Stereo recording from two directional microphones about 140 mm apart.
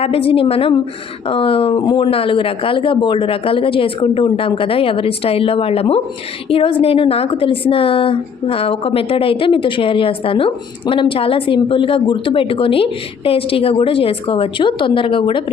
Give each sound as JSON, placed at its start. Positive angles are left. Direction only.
{"t": 0.0, "sound": "a woman's voice", "side_deg": 40}